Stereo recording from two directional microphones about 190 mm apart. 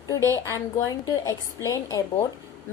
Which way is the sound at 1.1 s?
15° left (ahead or behind).